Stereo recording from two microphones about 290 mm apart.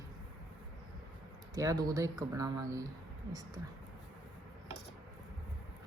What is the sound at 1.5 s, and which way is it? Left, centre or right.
Speech, centre.